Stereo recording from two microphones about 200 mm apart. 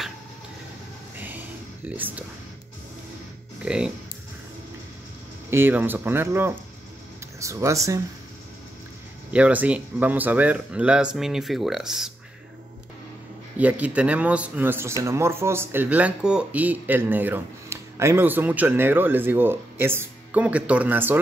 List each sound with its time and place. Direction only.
1.1 s a sound: 10° right (ahead or behind)
3.6 s speech: 5° right (ahead or behind)
5.5 s speech: 10° right (ahead or behind)
9.3 s speech: 5° right (ahead or behind)
13.6 s speech: 5° right (ahead or behind)